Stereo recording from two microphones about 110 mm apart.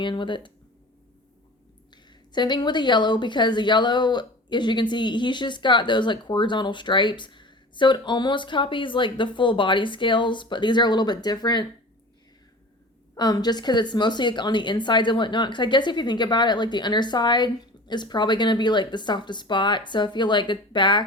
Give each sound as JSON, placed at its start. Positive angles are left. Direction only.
{"t": 0.0, "sound": "speech", "side_deg": 45}
{"t": 2.3, "sound": "speech", "side_deg": 45}
{"t": 13.1, "sound": "speech", "side_deg": 40}